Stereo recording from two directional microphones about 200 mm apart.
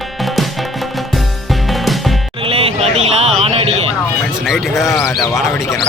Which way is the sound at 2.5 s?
30° right (ahead or behind).